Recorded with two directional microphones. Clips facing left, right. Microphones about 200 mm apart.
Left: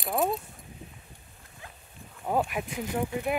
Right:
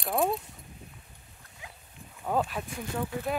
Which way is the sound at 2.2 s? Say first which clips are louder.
Left 1 dB; 15° left (ahead or behind).